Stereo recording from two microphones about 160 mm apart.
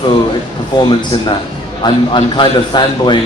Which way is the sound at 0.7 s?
25° left (ahead or behind).